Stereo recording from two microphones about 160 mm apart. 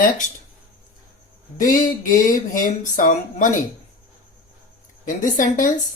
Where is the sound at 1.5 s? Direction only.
55° left (ahead or behind).